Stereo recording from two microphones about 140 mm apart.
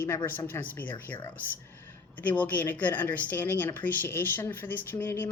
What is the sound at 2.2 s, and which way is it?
Speech, 10° left (ahead or behind).